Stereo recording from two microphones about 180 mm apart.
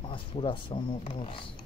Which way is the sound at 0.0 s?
30° left (ahead or behind).